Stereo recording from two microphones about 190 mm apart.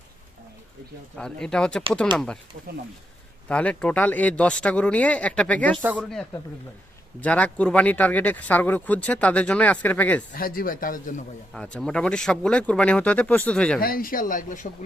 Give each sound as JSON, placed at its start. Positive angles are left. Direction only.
{"t": 1.1, "sound": "speech", "side_deg": 5}
{"t": 3.5, "sound": "speech", "side_deg": 5}
{"t": 10.3, "sound": "speech", "side_deg": 50}
{"t": 11.5, "sound": "speech", "side_deg": 5}
{"t": 13.7, "sound": "speech", "side_deg": 50}